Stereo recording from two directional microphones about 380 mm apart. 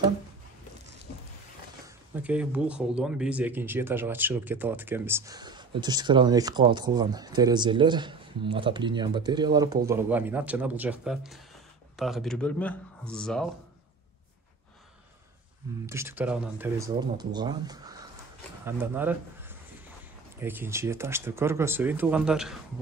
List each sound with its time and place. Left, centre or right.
2.1 s speech: centre
15.9 s a man's voice: centre